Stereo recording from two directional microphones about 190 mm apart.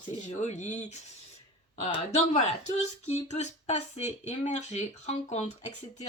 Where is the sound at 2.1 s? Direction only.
35° left (ahead or behind).